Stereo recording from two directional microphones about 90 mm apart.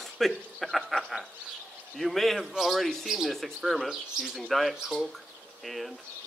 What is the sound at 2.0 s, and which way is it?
Speech, centre (ahead or behind).